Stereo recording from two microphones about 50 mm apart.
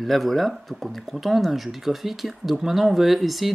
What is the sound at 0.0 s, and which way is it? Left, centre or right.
Speech, centre.